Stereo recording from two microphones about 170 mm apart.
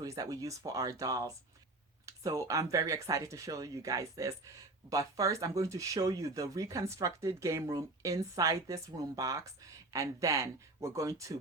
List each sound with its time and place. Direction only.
0.0 s speech: 20° right (ahead or behind)